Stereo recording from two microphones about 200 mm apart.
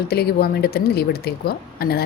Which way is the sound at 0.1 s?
50° left (ahead or behind).